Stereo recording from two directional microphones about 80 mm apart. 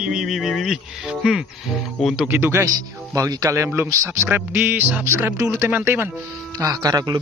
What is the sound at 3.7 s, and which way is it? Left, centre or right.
Speech, right.